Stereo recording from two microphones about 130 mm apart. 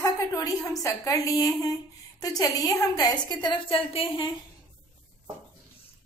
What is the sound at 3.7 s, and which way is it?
Speech, 45° left (ahead or behind).